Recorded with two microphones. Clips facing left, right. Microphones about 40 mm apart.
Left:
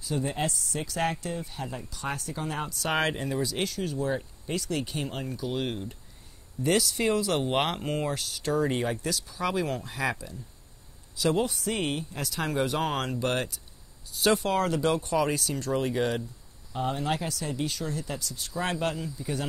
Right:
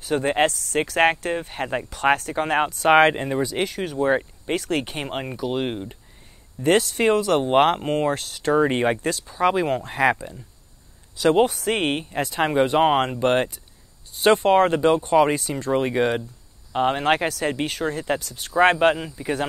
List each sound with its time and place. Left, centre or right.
0.0 s speech: right
2.7 s speech: right
9.2 s speech: right
12.2 s speech: right
16.7 s speech: right